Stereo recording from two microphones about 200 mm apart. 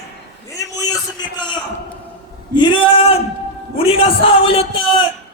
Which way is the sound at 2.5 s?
20° left (ahead or behind).